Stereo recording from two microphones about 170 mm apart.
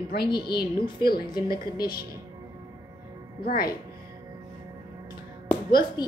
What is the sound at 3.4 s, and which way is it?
Speech, 60° left (ahead or behind).